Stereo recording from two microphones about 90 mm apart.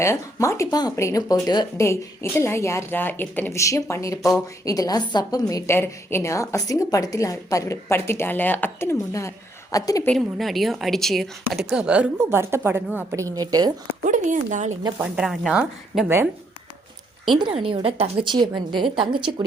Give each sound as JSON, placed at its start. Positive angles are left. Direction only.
{"t": 0.0, "sound": "a woman's voice", "side_deg": 35}
{"t": 0.7, "sound": "speech", "side_deg": 50}
{"t": 0.9, "sound": "a woman's voice", "side_deg": 35}
{"t": 1.8, "sound": "a woman's voice", "side_deg": 25}
{"t": 3.5, "sound": "a woman's voice", "side_deg": 35}
{"t": 5.7, "sound": "a woman's voice", "side_deg": 25}
{"t": 9.7, "sound": "a woman's voice", "side_deg": 40}
{"t": 10.2, "sound": "speech", "side_deg": 0}
{"t": 12.3, "sound": "a woman's voice", "side_deg": -30}
{"t": 13.1, "sound": "a woman's voice", "side_deg": -40}
{"t": 15.0, "sound": "a woman's voice", "side_deg": -10}
{"t": 17.2, "sound": "a woman's voice", "side_deg": -60}